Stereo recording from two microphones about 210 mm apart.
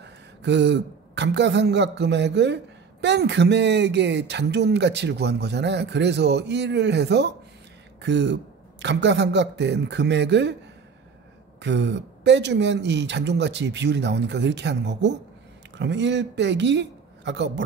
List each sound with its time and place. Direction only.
0.0 s speech: 55° right (ahead or behind)
11.6 s speech: 55° right (ahead or behind)